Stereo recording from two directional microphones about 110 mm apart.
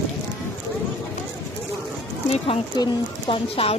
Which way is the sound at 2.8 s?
40° left (ahead or behind).